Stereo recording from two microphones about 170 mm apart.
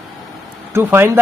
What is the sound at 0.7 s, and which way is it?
Speech, 15° right (ahead or behind).